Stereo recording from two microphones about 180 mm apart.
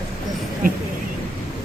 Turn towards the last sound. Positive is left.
turn(degrees=-50)  # may be behind; listen again after turning